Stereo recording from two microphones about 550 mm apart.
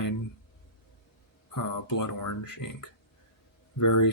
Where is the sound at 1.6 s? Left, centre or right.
Left.